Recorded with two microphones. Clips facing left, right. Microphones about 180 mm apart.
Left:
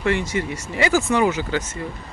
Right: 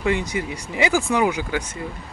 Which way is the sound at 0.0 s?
15° right (ahead or behind).